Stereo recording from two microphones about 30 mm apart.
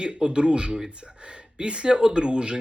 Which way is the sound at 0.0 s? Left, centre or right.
Right.